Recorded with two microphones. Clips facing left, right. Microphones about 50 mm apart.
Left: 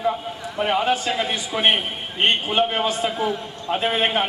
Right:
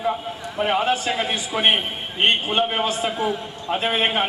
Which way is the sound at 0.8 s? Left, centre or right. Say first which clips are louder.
Even; centre.